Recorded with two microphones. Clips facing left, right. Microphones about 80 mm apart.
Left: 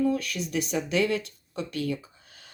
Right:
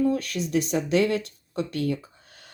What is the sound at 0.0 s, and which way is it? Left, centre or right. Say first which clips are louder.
Speech: right 2 dB; right.